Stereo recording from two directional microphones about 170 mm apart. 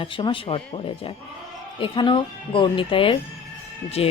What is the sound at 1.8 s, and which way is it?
Speech, 30° left (ahead or behind).